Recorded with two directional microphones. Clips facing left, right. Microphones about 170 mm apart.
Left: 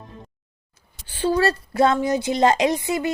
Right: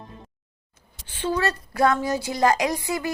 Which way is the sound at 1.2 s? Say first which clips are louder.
Left 5 dB; 35° left (ahead or behind).